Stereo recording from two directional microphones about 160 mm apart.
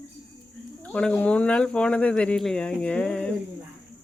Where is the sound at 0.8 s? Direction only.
10° left (ahead or behind).